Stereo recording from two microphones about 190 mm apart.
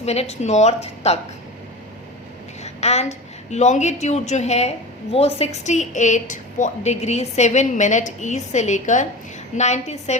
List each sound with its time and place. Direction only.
0.0 s a woman's voice: 35° left (ahead or behind)
2.6 s a woman's voice: 35° left (ahead or behind)